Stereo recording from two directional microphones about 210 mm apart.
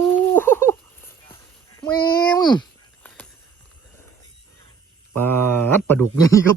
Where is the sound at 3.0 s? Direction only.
5° left (ahead or behind).